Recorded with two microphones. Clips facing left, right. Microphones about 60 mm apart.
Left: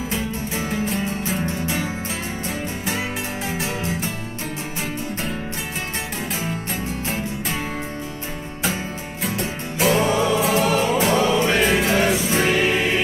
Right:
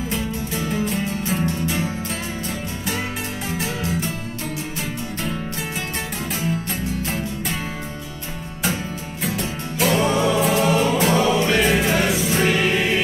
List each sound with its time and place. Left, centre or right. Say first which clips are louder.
0.7 s music: right 1 dB; centre
9.2 s music: even; centre